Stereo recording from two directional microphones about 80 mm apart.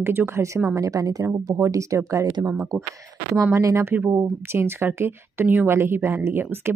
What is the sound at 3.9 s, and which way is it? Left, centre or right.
Speech, right.